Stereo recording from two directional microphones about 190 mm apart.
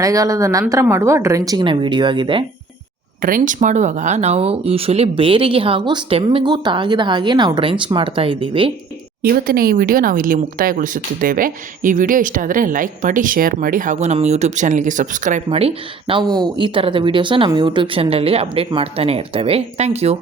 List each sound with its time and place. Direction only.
0.0 s a woman's voice: 15° right (ahead or behind)
3.2 s speech: 45° right (ahead or behind); by 8.7 s 30° right (ahead or behind)
9.2 s speech: 50° right (ahead or behind)
15.4 s speech: 30° right (ahead or behind)